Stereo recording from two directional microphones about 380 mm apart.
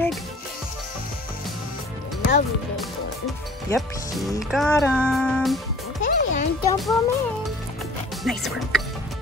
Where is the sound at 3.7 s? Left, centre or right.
Centre.